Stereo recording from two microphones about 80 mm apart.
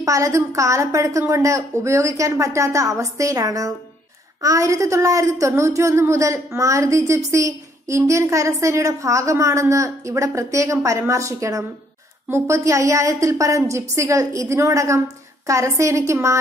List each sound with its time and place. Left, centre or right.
0.0 s a woman's voice: right